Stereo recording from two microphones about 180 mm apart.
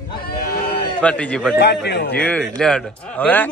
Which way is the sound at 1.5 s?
70° left (ahead or behind).